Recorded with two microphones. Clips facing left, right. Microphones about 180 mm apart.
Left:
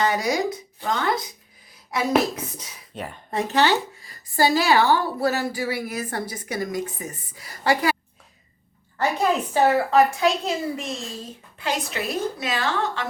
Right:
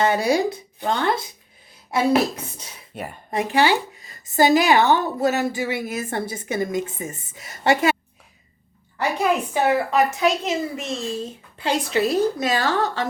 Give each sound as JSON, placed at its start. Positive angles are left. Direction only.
{"t": 0.0, "sound": "a woman's voice", "side_deg": -30}
{"t": 2.9, "sound": "a woman's voice", "side_deg": -10}
{"t": 9.5, "sound": "a woman's voice", "side_deg": -20}